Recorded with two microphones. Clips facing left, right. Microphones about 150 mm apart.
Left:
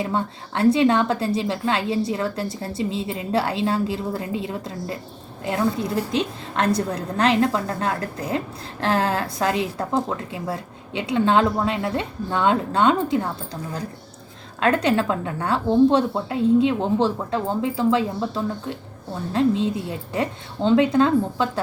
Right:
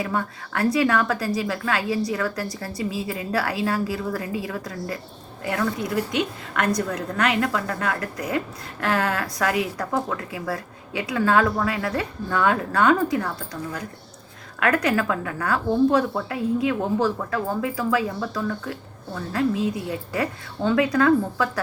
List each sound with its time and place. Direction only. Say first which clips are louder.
0.0 s speech: left 2 dB; 25° left (ahead or behind)